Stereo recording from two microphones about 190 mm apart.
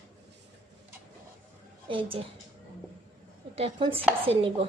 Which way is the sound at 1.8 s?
25° right (ahead or behind).